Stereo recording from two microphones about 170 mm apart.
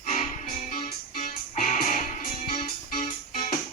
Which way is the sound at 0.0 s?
40° left (ahead or behind).